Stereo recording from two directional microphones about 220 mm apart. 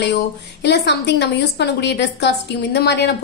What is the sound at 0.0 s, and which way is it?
A woman's voice, 50° left (ahead or behind).